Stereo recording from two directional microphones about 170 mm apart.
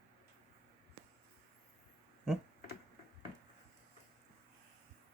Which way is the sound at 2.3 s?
Centre (ahead or behind).